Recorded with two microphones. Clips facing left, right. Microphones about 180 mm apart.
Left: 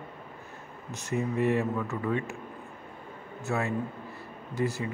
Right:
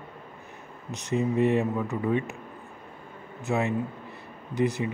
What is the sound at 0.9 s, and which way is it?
A man's voice, 20° right (ahead or behind).